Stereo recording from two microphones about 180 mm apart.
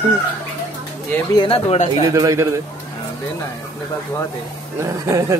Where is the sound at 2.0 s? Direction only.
20° right (ahead or behind).